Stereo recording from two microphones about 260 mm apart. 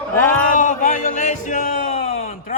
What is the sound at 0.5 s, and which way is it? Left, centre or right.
Speech, left.